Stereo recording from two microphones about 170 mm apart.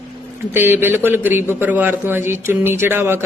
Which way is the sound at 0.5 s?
15° right (ahead or behind).